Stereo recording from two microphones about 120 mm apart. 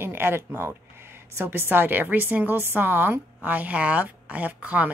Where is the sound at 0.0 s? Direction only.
20° right (ahead or behind).